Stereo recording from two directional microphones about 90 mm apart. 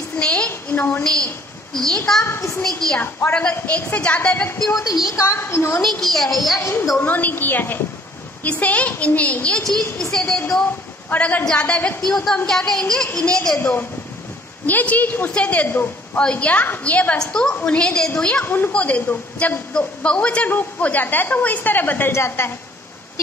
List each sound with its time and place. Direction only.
0.2 s a sound: 10° left (ahead or behind)
0.5 s a sound: 25° left (ahead or behind)
1.7 s a woman's voice: 5° left (ahead or behind)
2.2 s a woman's voice: 30° left (ahead or behind)
3.3 s a woman's voice: 15° left (ahead or behind)
5.1 s a woman's voice: 35° left (ahead or behind)
5.8 s a woman's voice: 5° left (ahead or behind)
6.6 s a woman's voice: 25° left (ahead or behind); by 10.4 s 5° left (ahead or behind)
11.1 s a woman's voice: 20° left (ahead or behind)
13.6 s a woman's voice: 20° left (ahead or behind)
18.4 s a woman's voice: 25° left (ahead or behind)